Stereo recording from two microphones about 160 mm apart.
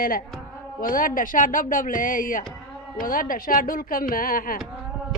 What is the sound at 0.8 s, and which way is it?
Speech, 60° left (ahead or behind).